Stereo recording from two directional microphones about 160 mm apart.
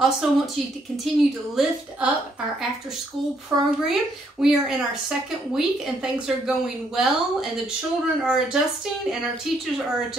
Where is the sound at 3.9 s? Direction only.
5° right (ahead or behind).